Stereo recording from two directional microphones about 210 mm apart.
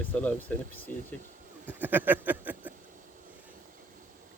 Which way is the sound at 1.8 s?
10° right (ahead or behind).